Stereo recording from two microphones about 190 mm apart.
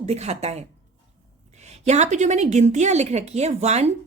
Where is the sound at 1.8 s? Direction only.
35° right (ahead or behind).